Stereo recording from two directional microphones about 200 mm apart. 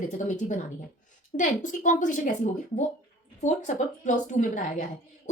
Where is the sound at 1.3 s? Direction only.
40° left (ahead or behind).